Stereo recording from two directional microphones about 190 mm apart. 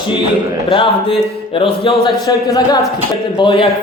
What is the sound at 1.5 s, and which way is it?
Speech, 30° left (ahead or behind).